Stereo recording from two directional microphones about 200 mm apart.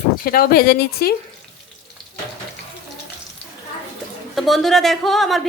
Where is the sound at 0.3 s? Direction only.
50° left (ahead or behind).